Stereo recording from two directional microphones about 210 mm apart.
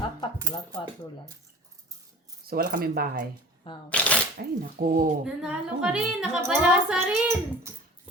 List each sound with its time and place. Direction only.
2.5 s speech: 45° right (ahead or behind)
3.8 s speech: 5° left (ahead or behind)
4.4 s speech: 45° right (ahead or behind)
5.2 s speech: 5° right (ahead or behind)